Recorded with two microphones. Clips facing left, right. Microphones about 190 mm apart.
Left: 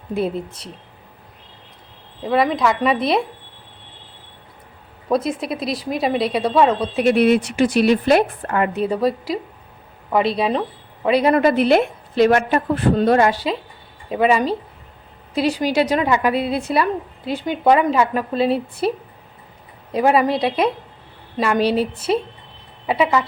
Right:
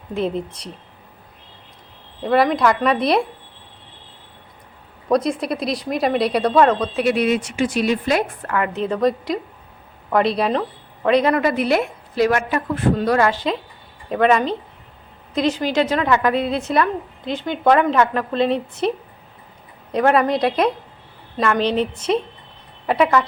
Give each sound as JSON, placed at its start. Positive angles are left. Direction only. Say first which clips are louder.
{"t": 0.1, "sound": "a woman's voice", "louder": "even", "side_deg": 5}
{"t": 2.2, "sound": "a woman's voice", "louder": "right 1 dB", "side_deg": 0}
{"t": 5.0, "sound": "a woman's voice", "louder": "right 1 dB", "side_deg": 5}
{"t": 7.2, "sound": "speech", "louder": "left 4 dB", "side_deg": 60}
{"t": 8.4, "sound": "a woman's voice", "louder": "left 2 dB", "side_deg": 30}
{"t": 8.7, "sound": "a woman's voice", "louder": "even", "side_deg": 10}
{"t": 11.3, "sound": "a woman's voice", "louder": "left 4 dB", "side_deg": 25}
{"t": 13.3, "sound": "a woman's voice", "louder": "even", "side_deg": 10}